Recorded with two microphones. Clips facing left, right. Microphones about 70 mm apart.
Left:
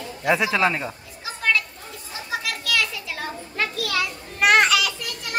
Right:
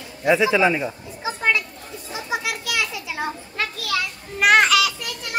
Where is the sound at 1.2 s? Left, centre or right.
Right.